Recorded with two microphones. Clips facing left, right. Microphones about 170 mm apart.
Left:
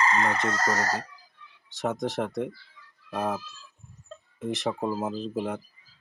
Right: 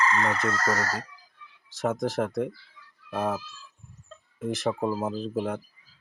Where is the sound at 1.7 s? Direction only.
Centre (ahead or behind).